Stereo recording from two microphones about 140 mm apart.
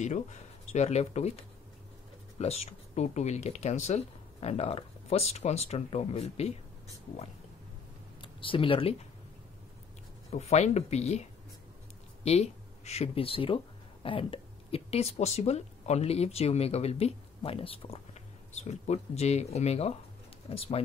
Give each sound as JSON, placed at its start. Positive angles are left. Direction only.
{"t": 0.0, "sound": "speech", "side_deg": 60}
{"t": 8.2, "sound": "speech", "side_deg": 40}
{"t": 10.3, "sound": "speech", "side_deg": 50}
{"t": 12.3, "sound": "speech", "side_deg": 50}